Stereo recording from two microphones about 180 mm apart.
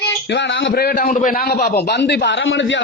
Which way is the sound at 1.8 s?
70° left (ahead or behind).